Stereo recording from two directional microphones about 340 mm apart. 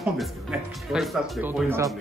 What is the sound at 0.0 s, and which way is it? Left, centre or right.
Speech, centre.